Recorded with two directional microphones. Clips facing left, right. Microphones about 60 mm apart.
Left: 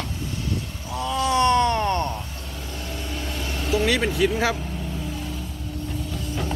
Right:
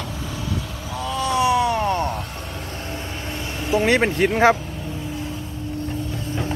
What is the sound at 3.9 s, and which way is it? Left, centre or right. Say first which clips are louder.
Speech: right 5 dB; right.